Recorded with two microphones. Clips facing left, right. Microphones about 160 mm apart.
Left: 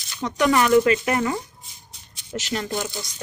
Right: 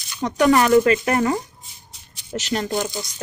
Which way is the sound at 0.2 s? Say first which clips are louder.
Right 3 dB; 45° right (ahead or behind).